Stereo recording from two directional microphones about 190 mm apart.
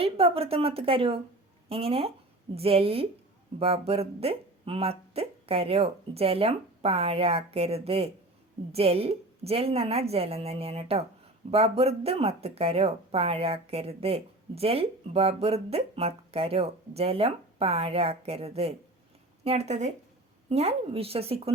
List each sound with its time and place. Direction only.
0.0 s speech: 30° right (ahead or behind)